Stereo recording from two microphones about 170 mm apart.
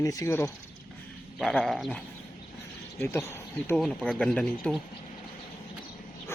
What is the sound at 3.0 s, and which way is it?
Speech, 15° left (ahead or behind).